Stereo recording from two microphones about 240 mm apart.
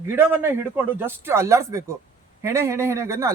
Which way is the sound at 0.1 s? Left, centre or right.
Centre.